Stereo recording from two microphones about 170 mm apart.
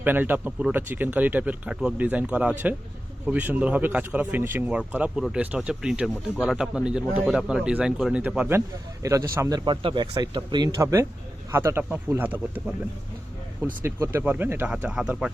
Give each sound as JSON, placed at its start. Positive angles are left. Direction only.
{"t": 0.0, "sound": "speech", "side_deg": -10}
{"t": 9.6, "sound": "speech", "side_deg": -30}
{"t": 13.8, "sound": "speech", "side_deg": -15}